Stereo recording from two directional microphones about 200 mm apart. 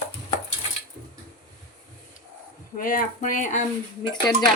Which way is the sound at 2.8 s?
45° left (ahead or behind).